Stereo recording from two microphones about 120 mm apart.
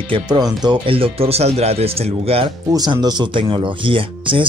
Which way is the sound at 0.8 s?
50° right (ahead or behind).